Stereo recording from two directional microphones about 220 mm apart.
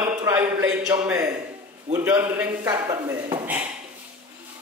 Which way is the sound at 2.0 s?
10° right (ahead or behind).